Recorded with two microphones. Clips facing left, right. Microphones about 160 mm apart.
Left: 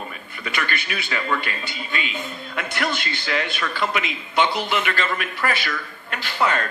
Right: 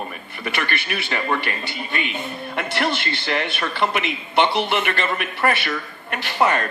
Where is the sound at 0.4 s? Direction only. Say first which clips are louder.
Right 2 dB; 60° right (ahead or behind).